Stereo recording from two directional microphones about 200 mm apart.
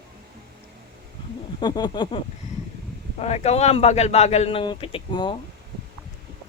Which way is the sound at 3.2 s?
35° left (ahead or behind).